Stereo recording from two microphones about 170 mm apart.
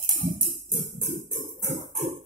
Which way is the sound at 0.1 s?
55° right (ahead or behind).